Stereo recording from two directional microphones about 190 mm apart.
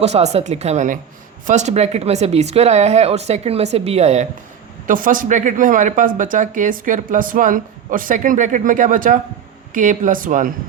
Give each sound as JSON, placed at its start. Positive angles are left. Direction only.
{"t": 0.0, "sound": "speech", "side_deg": -35}
{"t": 4.9, "sound": "speech", "side_deg": -45}